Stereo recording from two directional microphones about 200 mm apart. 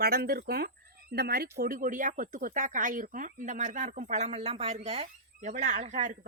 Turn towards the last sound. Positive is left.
turn(degrees=-40)  # may be behind; listen again after turning